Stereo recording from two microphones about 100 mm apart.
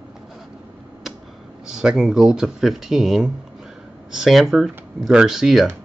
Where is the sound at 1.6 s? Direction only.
5° right (ahead or behind).